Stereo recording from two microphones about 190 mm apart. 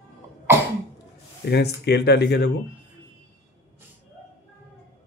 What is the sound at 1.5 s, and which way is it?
Speech, 60° left (ahead or behind).